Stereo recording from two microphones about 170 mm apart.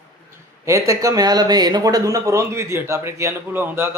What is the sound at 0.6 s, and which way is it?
A man's voice, 20° right (ahead or behind).